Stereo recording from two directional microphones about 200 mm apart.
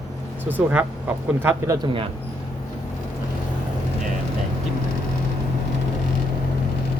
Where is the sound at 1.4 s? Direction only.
15° right (ahead or behind).